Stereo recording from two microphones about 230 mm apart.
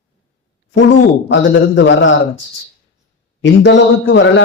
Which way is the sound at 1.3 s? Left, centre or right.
Left.